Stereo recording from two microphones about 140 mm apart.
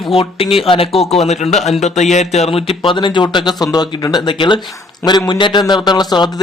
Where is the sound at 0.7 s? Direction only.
45° left (ahead or behind).